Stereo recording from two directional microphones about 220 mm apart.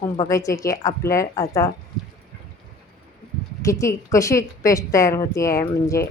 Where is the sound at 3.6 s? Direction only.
15° left (ahead or behind).